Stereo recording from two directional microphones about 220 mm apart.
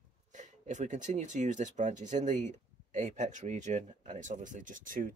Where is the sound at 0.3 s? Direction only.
35° right (ahead or behind).